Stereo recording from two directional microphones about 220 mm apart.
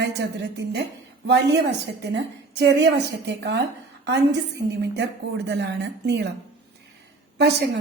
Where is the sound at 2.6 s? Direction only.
50° right (ahead or behind).